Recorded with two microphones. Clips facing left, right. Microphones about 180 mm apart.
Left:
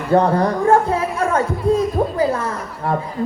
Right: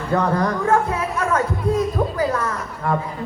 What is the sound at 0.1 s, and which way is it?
A woman's voice, 30° left (ahead or behind).